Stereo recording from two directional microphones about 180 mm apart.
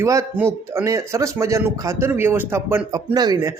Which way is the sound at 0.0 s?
15° right (ahead or behind).